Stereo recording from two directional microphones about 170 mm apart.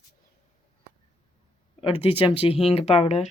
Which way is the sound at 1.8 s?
30° left (ahead or behind).